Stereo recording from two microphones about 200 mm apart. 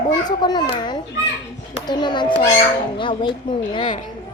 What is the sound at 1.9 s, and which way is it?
Speech, 20° left (ahead or behind).